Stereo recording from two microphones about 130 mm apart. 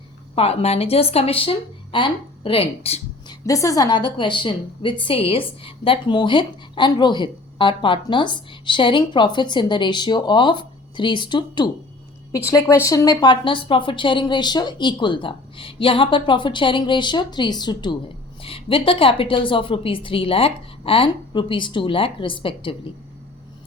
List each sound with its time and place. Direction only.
0.3 s a woman's voice: 50° left (ahead or behind)
3.2 s a woman's voice: 25° left (ahead or behind)
12.5 s a woman's voice: 20° left (ahead or behind)
18.4 s a woman's voice: 45° left (ahead or behind)